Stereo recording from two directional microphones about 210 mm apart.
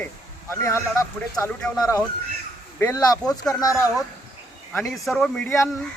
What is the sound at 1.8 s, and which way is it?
Speech, 15° left (ahead or behind).